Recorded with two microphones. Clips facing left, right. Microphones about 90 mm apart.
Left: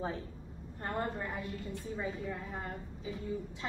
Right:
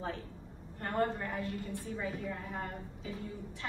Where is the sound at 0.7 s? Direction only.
20° left (ahead or behind).